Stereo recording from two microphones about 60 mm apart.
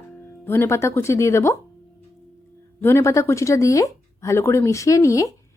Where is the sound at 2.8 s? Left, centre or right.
Left.